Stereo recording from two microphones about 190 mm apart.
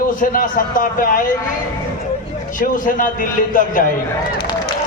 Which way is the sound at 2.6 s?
45° left (ahead or behind).